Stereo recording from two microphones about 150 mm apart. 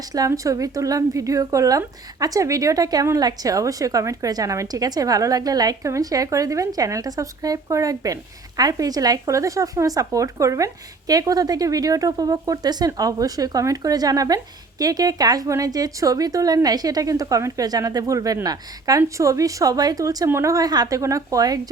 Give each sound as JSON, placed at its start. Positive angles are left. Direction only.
{"t": 0.1, "sound": "a woman's voice", "side_deg": -25}